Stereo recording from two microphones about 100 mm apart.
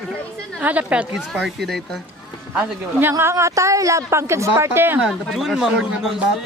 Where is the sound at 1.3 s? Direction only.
Centre (ahead or behind).